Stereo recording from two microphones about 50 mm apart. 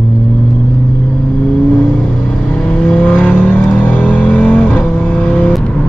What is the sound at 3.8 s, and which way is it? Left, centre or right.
Music, left.